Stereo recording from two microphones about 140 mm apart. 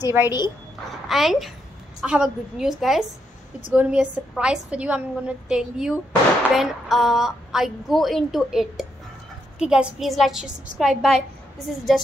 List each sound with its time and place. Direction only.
0.0 s a woman's voice: 15° right (ahead or behind)
1.0 s a woman's voice: centre (ahead or behind)